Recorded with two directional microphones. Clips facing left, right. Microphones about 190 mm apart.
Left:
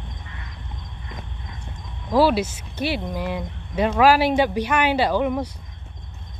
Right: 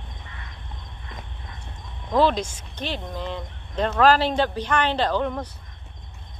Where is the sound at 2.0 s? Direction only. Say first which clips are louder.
Left 2 dB; 5° left (ahead or behind).